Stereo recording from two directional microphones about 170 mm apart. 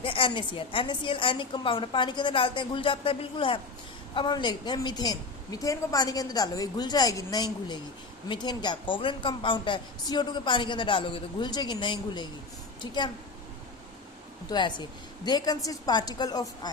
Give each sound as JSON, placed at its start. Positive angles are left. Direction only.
{"t": 0.0, "sound": "a woman's voice", "side_deg": 30}
{"t": 14.5, "sound": "a woman's voice", "side_deg": 25}